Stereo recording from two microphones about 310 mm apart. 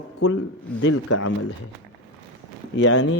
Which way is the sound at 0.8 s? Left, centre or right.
Left.